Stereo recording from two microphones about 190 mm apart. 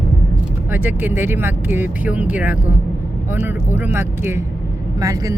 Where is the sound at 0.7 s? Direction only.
10° right (ahead or behind).